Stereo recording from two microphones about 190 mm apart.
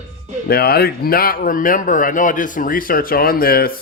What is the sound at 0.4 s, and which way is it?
A man's voice, 55° left (ahead or behind).